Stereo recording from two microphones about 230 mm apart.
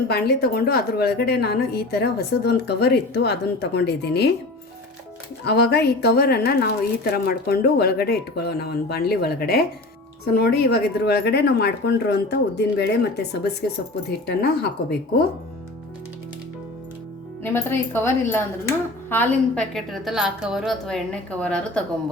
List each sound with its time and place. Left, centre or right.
0.1 s a woman's voice: left
5.5 s a woman's voice: left
14.3 s a woman's voice: left
17.4 s a woman's voice: centre